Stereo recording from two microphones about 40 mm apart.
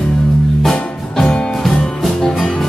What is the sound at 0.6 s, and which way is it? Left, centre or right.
Music, centre.